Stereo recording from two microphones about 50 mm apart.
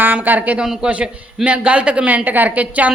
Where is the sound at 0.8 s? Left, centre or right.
Right.